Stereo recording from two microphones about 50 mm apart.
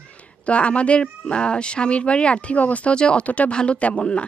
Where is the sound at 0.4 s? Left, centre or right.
Left.